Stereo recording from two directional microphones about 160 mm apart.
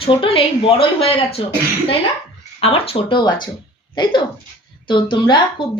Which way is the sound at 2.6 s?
35° left (ahead or behind).